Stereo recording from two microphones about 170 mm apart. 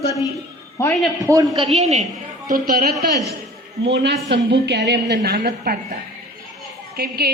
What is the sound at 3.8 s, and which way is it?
A man's voice, 85° right.